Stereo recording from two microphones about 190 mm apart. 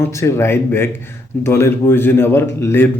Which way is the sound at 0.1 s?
15° left (ahead or behind).